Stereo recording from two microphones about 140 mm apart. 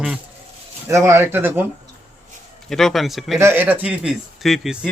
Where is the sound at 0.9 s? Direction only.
20° right (ahead or behind).